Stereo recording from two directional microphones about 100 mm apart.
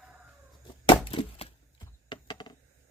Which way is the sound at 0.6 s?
50° left (ahead or behind).